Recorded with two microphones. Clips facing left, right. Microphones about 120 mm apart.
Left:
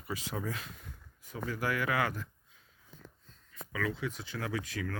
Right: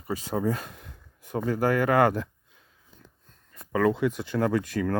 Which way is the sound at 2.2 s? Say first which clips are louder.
Right 12 dB; 65° right (ahead or behind).